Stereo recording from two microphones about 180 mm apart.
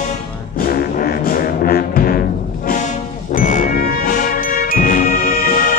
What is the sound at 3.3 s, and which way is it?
Music, 45° left (ahead or behind).